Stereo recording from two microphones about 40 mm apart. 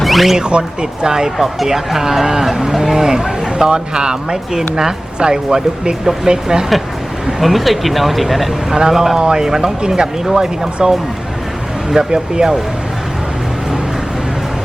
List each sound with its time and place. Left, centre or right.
0.0 s a sound: centre
0.3 s speech: right
7.4 s speech: centre
11.9 s speech: centre